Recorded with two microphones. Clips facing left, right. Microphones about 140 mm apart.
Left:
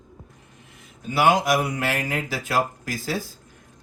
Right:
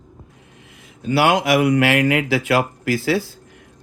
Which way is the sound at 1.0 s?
80° right.